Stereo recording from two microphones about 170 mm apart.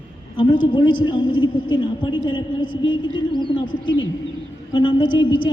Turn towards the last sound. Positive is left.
turn(degrees=30)  # may be behind; listen again after turning